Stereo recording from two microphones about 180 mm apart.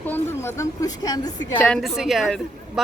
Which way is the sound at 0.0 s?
10° left (ahead or behind).